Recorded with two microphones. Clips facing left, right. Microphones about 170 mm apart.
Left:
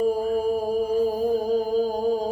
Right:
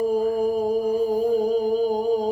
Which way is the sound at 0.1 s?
20° right (ahead or behind).